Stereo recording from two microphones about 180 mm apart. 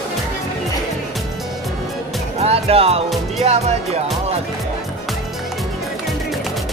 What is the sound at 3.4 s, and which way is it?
Speech, 35° right (ahead or behind).